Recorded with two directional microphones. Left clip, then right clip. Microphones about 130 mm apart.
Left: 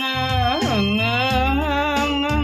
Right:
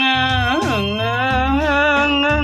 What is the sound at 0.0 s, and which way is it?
Music, 15° left (ahead or behind).